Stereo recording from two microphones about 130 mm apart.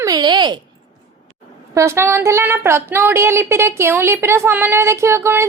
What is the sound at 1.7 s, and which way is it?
A woman's voice, 20° right (ahead or behind).